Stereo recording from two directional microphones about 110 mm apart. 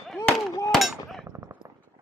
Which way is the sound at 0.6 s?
Centre (ahead or behind).